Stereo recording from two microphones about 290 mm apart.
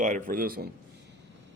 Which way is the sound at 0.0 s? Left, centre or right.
Right.